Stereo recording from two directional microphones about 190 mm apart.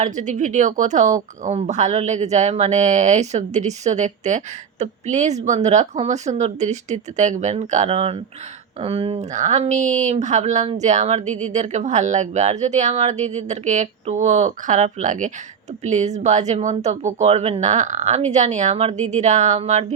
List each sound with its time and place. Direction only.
0.0 s a woman's voice: 40° right (ahead or behind)